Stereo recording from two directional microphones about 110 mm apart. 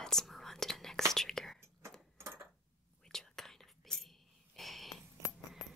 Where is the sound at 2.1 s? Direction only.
25° right (ahead or behind).